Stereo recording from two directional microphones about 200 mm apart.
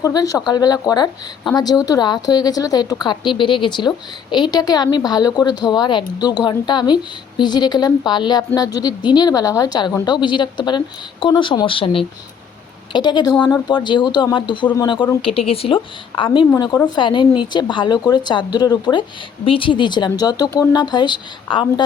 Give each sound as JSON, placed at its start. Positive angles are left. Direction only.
{"t": 0.0, "sound": "a woman's voice", "side_deg": 15}